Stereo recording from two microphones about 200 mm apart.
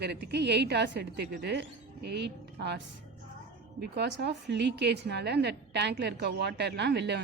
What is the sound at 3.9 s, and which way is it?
A woman's voice, 55° right (ahead or behind).